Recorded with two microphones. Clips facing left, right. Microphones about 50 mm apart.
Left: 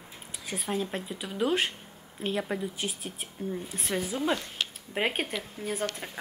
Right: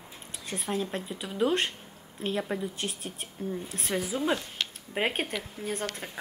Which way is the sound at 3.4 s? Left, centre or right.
Centre.